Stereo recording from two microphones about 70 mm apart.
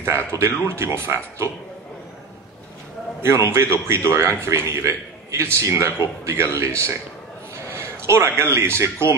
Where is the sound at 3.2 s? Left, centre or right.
Right.